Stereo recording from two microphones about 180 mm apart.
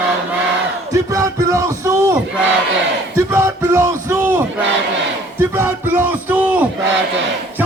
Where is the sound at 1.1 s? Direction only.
20° right (ahead or behind).